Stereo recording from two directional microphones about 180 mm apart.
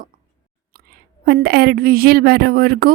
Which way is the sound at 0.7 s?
55° right (ahead or behind).